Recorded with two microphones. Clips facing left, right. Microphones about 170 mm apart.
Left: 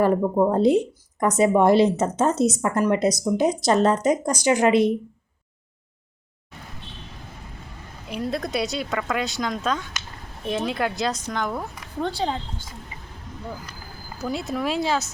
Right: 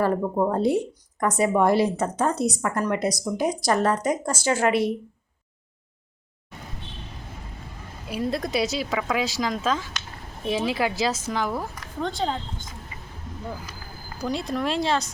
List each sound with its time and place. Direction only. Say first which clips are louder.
0.2 s speech: left 3 dB; 10° left (ahead or behind)
0.5 s speech: left 4 dB; 20° left (ahead or behind)
8.0 s speech: right 1 dB; centre (ahead or behind)
14.2 s speech: even; 5° left (ahead or behind)